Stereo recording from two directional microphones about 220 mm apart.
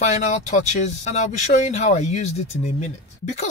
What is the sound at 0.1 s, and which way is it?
Speech, 30° left (ahead or behind).